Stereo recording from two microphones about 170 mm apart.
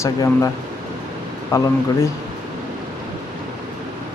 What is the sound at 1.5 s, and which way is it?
Speech, 15° left (ahead or behind).